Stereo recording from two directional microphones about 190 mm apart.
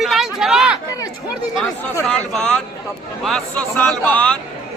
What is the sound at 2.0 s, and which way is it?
Speech, 5° left (ahead or behind).